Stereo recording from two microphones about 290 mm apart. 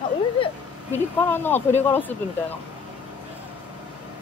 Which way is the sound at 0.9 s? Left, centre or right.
Centre.